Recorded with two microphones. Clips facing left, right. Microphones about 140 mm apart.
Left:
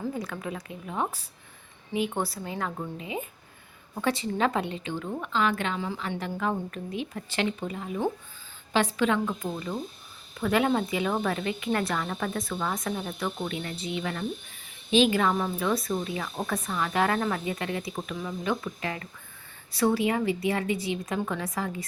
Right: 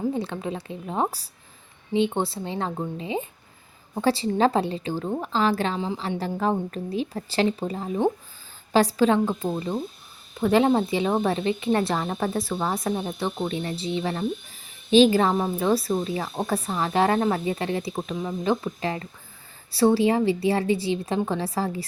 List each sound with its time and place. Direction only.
0.1 s speech: 25° right (ahead or behind)
1.9 s a woman's voice: 25° right (ahead or behind)